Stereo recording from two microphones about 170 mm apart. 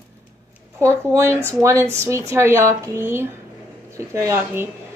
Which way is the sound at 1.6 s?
15° right (ahead or behind).